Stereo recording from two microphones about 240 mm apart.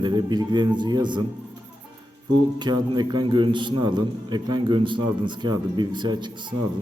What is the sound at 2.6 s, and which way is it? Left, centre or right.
A man's voice, centre.